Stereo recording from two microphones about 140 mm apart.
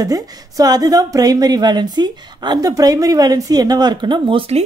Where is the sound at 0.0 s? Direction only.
25° right (ahead or behind).